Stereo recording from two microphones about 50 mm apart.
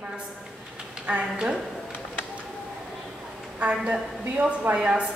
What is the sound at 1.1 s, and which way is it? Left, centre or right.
Speech, right.